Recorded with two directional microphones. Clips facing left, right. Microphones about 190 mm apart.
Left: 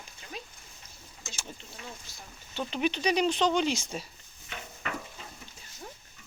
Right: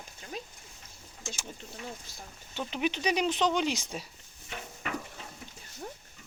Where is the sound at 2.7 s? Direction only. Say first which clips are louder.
Left 2 dB; 15° right (ahead or behind).